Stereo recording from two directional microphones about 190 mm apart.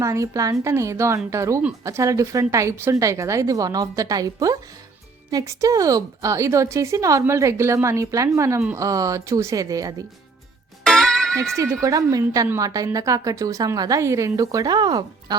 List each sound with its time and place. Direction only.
0.0 s a woman's voice: 15° right (ahead or behind)
10.8 s music: 5° left (ahead or behind)
11.5 s a woman's voice: 15° right (ahead or behind)